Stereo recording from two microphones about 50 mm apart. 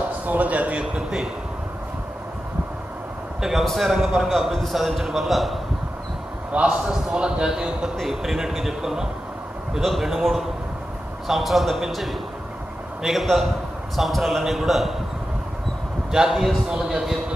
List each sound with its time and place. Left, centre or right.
0.3 s a man's voice: right
0.7 s a man's voice: centre
3.3 s a man's voice: centre
6.5 s a man's voice: right; by 15.0 s centre
16.1 s a man's voice: centre